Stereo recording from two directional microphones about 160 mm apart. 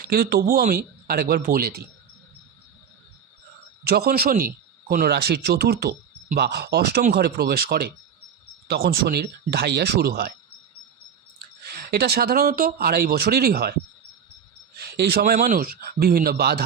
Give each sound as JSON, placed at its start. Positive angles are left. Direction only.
{"t": 0.0, "sound": "speech", "side_deg": -80}
{"t": 3.8, "sound": "speech", "side_deg": -75}
{"t": 11.9, "sound": "speech", "side_deg": -80}
{"t": 14.8, "sound": "a sound", "side_deg": -85}
{"t": 15.3, "sound": "speech", "side_deg": -60}